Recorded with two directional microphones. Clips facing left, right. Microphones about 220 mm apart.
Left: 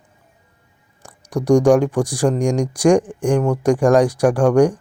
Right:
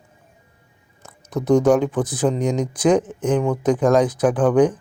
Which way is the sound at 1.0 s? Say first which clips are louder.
Left 2 dB; 15° left (ahead or behind).